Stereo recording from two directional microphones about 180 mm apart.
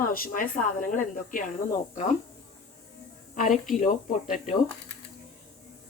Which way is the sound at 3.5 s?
Centre (ahead or behind).